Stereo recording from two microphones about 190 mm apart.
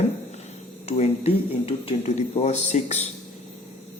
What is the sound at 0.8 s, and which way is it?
Speech, 35° left (ahead or behind).